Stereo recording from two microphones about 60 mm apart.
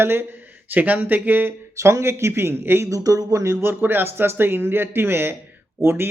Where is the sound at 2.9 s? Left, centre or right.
Right.